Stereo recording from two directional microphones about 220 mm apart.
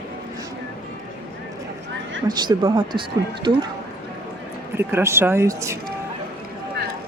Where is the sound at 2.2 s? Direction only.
20° right (ahead or behind).